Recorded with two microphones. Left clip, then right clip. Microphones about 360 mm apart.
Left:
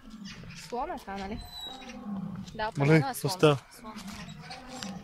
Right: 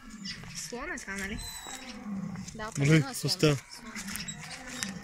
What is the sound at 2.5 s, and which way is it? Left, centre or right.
Speech, left.